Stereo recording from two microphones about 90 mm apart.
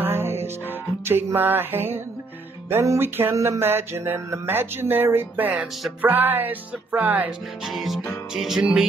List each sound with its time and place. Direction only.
0.0 s music: 25° right (ahead or behind)
7.6 s music: centre (ahead or behind)